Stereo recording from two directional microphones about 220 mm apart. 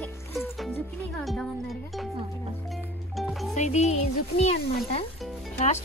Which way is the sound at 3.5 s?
30° left (ahead or behind).